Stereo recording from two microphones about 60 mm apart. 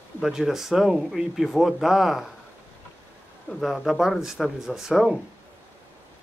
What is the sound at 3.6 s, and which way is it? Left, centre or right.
Speech, centre.